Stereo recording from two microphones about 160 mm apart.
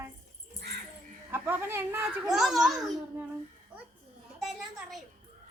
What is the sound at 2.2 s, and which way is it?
Speech, centre (ahead or behind).